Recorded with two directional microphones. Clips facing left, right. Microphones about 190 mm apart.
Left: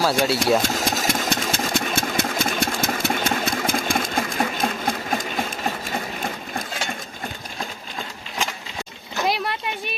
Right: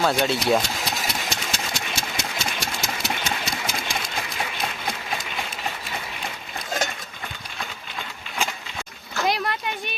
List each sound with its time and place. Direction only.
0.0 s speech: 5° left (ahead or behind)
0.6 s engine: 45° left (ahead or behind)
9.2 s a sound: centre (ahead or behind)